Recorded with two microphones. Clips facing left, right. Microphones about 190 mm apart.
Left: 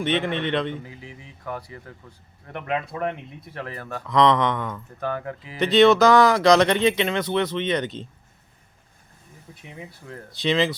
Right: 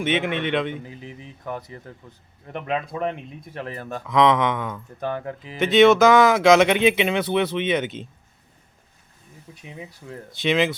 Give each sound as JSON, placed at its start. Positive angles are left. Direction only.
{"t": 0.0, "sound": "speech", "side_deg": -5}
{"t": 1.2, "sound": "speech", "side_deg": -20}
{"t": 4.0, "sound": "speech", "side_deg": 0}
{"t": 4.9, "sound": "speech", "side_deg": -20}
{"t": 5.5, "sound": "speech", "side_deg": 0}
{"t": 10.5, "sound": "speech", "side_deg": -5}